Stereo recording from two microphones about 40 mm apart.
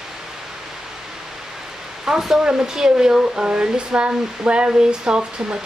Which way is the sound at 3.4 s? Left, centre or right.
Right.